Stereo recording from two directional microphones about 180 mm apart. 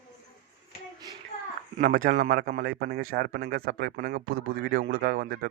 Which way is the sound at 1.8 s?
50° right (ahead or behind).